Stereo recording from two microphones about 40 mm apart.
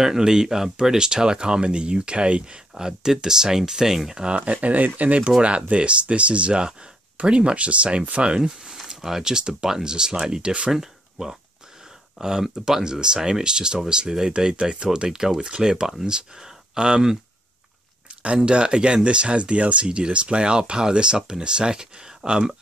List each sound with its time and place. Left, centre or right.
0.0 s speech: centre
2.7 s speech: centre
4.5 s speech: right
8.5 s speech: centre
10.7 s speech: centre
18.2 s speech: right